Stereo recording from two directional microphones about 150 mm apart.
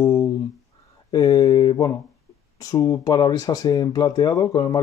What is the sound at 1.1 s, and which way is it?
Speech, 25° left (ahead or behind).